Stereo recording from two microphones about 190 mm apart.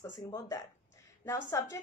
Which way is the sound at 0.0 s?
15° left (ahead or behind).